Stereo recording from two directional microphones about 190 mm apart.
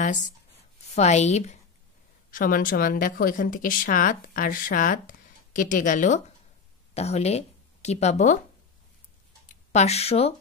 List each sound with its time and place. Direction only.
0.9 s a woman's voice: 35° left (ahead or behind)
2.3 s speech: 45° left (ahead or behind)
9.7 s a woman's voice: 35° left (ahead or behind)